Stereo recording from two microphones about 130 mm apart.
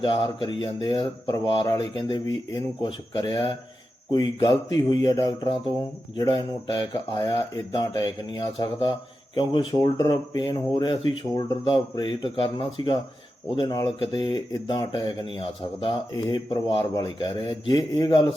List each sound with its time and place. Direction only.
0.0 s speech: 35° left (ahead or behind)
6.1 s speech: 35° left (ahead or behind)